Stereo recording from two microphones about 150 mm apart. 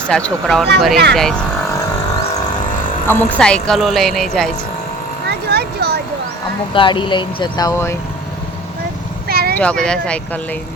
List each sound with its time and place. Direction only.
0.1 s a woman's voice: 5° left (ahead or behind)
3.1 s a woman's voice: 10° left (ahead or behind)
5.3 s a sound: 90° right
6.7 s speech: 35° left (ahead or behind)
9.3 s vehicle: 90° right
9.6 s speech: 5° left (ahead or behind)